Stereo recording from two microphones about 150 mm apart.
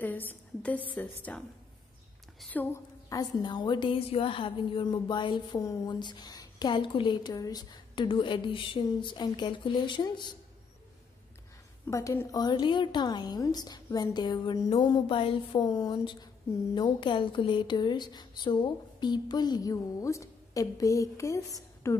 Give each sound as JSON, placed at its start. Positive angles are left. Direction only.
{"t": 0.0, "sound": "a woman's voice", "side_deg": 10}
{"t": 2.4, "sound": "a woman's voice", "side_deg": 10}
{"t": 11.9, "sound": "a woman's voice", "side_deg": 20}